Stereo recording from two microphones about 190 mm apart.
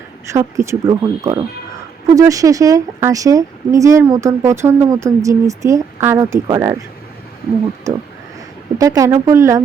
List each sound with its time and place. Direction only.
0.3 s a woman's voice: 15° right (ahead or behind)
8.8 s a woman's voice: 15° right (ahead or behind)